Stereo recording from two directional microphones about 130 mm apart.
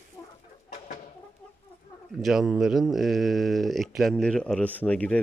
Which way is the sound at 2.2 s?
Centre (ahead or behind).